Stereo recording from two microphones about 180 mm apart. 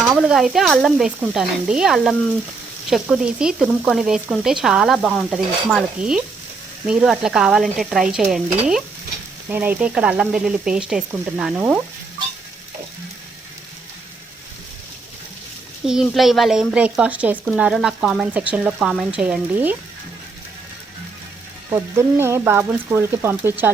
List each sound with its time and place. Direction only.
0.0 s speech: 5° right (ahead or behind)
15.9 s speech: centre (ahead or behind)
21.7 s speech: 15° right (ahead or behind)